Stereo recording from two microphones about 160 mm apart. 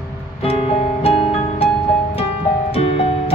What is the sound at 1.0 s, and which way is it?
Music, 35° left (ahead or behind).